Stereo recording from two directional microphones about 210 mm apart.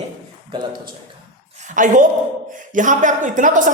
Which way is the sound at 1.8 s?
40° right (ahead or behind).